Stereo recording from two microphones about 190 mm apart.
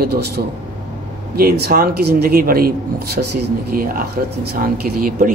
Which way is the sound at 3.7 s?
50° right (ahead or behind).